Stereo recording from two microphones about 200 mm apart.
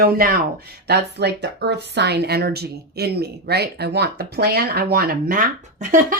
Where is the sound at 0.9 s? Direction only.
55° right (ahead or behind).